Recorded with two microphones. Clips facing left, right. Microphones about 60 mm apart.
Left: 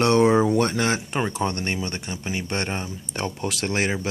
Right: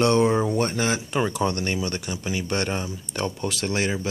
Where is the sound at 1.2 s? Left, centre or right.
Left.